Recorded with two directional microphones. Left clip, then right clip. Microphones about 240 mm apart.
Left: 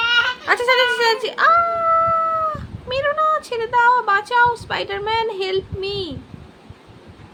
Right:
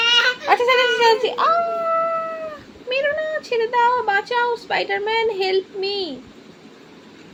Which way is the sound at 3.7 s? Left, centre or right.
Left.